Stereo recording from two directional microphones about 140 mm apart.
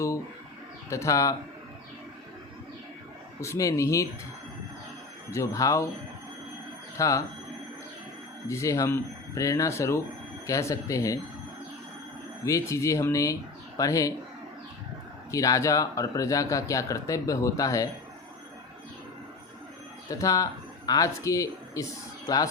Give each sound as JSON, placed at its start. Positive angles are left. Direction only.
{"t": 0.9, "sound": "speech", "side_deg": 20}
{"t": 3.4, "sound": "speech", "side_deg": 20}
{"t": 5.3, "sound": "speech", "side_deg": 20}
{"t": 7.0, "sound": "speech", "side_deg": 20}
{"t": 8.4, "sound": "speech", "side_deg": 20}
{"t": 12.5, "sound": "speech", "side_deg": 20}
{"t": 15.3, "sound": "speech", "side_deg": 25}
{"t": 20.1, "sound": "speech", "side_deg": 25}